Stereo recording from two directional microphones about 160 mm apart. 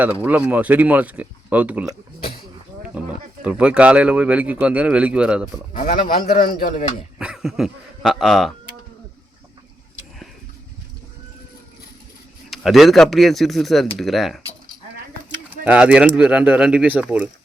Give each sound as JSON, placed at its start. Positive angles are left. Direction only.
{"t": 0.0, "sound": "speech", "side_deg": -10}
{"t": 3.0, "sound": "a sound", "side_deg": -10}
{"t": 3.4, "sound": "speech", "side_deg": -5}
{"t": 5.7, "sound": "speech", "side_deg": 55}
{"t": 7.2, "sound": "speech", "side_deg": -5}
{"t": 12.5, "sound": "speech", "side_deg": 0}
{"t": 15.6, "sound": "speech", "side_deg": -10}